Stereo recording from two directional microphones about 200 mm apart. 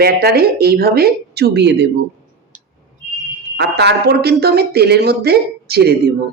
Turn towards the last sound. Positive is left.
turn(degrees=-50)  # may be behind; listen again after turning